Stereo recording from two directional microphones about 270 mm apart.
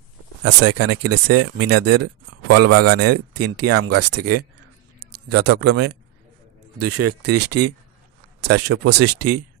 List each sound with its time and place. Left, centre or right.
0.4 s speech: right
5.5 s speech: right